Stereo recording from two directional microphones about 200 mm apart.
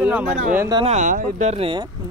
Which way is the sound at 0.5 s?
20° right (ahead or behind).